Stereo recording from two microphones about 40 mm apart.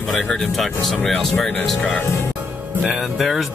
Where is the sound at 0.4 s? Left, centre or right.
Centre.